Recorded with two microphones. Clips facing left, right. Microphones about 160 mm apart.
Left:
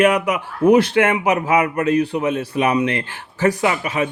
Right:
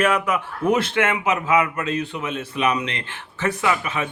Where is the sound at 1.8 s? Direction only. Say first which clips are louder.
Left 8 dB; 25° right (ahead or behind).